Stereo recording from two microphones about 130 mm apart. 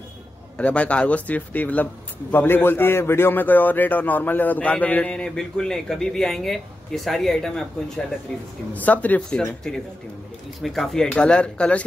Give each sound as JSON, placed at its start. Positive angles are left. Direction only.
{"t": 0.6, "sound": "a man's voice", "side_deg": 10}